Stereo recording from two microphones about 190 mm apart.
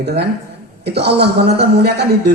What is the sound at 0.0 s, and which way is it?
Speech, 60° right (ahead or behind).